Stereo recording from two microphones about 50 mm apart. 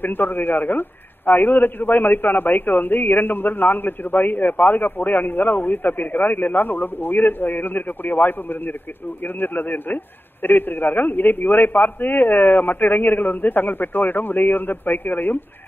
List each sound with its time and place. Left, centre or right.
0.0 s a man's voice: left